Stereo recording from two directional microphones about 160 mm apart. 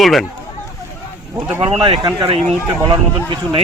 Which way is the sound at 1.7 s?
35° right (ahead or behind).